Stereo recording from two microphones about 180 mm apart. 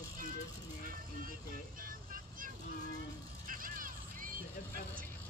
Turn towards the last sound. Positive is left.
turn(degrees=-50)  # may be behind; listen again after turning